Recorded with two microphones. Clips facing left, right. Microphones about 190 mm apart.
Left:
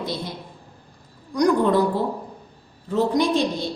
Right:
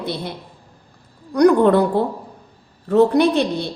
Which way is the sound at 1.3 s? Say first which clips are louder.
Right 6 dB; 60° right (ahead or behind).